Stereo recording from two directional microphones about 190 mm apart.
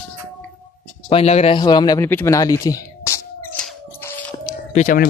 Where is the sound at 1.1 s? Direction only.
35° left (ahead or behind); by 3.6 s 15° left (ahead or behind).